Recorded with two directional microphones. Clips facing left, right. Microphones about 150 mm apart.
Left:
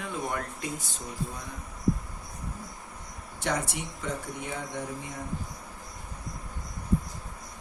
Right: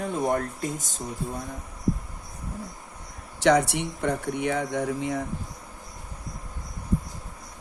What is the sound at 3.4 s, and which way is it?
Speech, 70° right (ahead or behind).